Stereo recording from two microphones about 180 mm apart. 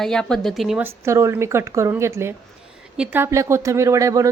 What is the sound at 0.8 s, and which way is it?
A woman's voice, 15° right (ahead or behind).